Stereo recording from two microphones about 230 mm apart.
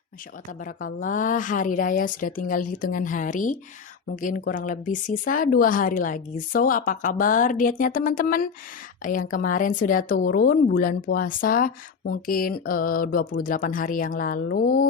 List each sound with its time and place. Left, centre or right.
0.9 s a woman's voice: left